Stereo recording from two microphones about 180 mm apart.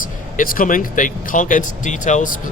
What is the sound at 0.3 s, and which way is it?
Speech, 50° left (ahead or behind).